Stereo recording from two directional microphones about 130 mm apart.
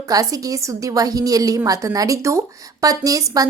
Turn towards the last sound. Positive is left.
turn(degrees=-25)  # may be behind; listen again after turning